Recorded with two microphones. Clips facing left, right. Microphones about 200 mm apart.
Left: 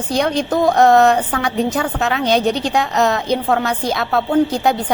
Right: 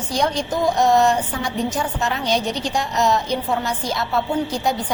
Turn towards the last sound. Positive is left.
turn(degrees=60)  # may be behind; listen again after turning